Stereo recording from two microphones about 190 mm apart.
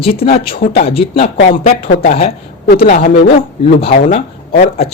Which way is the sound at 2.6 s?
55° left (ahead or behind).